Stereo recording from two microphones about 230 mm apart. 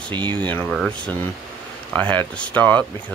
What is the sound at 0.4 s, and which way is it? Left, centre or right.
Speech, centre.